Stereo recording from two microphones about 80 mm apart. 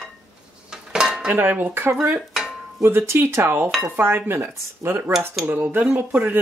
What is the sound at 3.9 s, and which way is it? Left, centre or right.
Speech, right.